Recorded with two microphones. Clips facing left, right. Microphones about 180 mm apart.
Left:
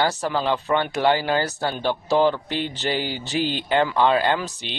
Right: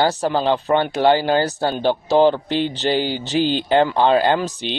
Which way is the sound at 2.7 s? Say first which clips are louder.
Right 5 dB; 35° right (ahead or behind).